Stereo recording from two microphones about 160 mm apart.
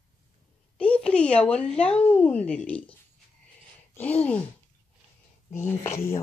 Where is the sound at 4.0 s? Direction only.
10° left (ahead or behind).